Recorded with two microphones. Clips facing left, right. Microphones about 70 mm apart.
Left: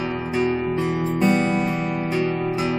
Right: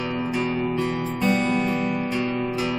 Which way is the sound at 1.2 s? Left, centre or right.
Centre.